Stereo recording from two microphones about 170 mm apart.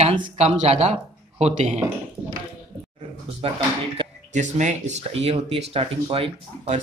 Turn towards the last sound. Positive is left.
turn(degrees=-35)  # may be behind; listen again after turning